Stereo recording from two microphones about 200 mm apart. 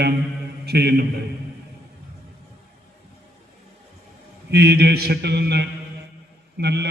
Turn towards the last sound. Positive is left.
turn(degrees=-55)  # may be behind; listen again after turning